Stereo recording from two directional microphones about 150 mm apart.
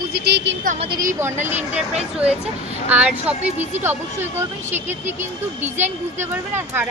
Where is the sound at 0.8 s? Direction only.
30° right (ahead or behind).